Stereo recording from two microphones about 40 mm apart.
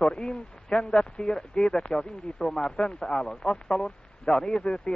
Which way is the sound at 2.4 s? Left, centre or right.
Centre.